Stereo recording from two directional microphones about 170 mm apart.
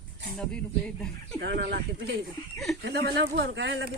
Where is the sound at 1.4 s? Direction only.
75° right (ahead or behind).